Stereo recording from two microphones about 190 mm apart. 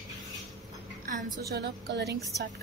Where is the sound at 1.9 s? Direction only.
60° right (ahead or behind).